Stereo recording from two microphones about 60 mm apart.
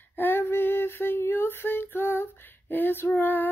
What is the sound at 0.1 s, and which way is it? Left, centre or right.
Female singing, left.